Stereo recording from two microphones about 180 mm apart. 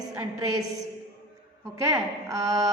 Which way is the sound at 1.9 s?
15° right (ahead or behind).